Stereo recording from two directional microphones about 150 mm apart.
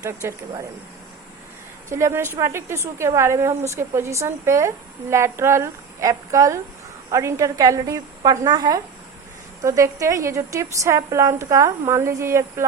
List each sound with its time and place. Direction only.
0.0 s a woman's voice: 20° right (ahead or behind)
1.9 s a woman's voice: 20° right (ahead or behind)